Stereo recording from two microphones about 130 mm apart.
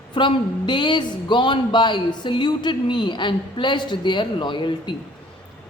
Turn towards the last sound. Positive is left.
turn(degrees=40)  # may be behind; listen again after turning